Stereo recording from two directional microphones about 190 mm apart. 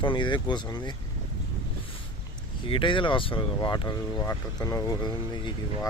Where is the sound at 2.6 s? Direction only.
25° left (ahead or behind).